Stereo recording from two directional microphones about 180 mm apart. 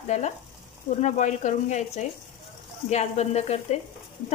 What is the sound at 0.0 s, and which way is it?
Speech, 40° left (ahead or behind).